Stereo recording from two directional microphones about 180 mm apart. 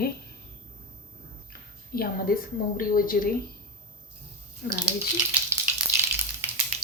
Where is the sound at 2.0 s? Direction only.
55° left (ahead or behind).